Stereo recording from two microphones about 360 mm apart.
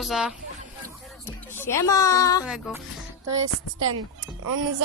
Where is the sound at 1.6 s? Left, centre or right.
Centre.